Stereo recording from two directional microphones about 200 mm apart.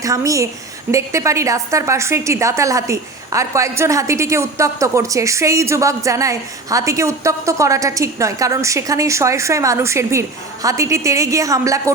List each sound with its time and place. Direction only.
0.0 s a woman's voice: 15° right (ahead or behind)